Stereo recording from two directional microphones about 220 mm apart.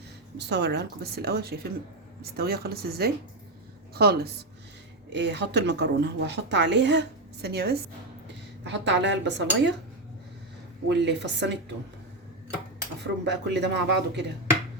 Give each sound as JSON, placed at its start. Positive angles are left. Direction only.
{"t": 0.3, "sound": "a woman's voice", "side_deg": -50}
{"t": 10.8, "sound": "a woman's voice", "side_deg": -55}
{"t": 13.0, "sound": "a woman's voice", "side_deg": -50}